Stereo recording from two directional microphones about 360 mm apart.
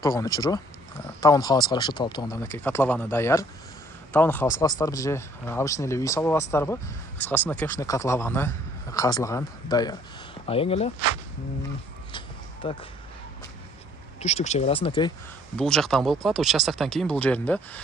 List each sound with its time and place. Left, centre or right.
0.0 s a man's voice: centre
12.6 s a man's voice: centre
14.2 s a man's voice: centre
15.5 s speech: centre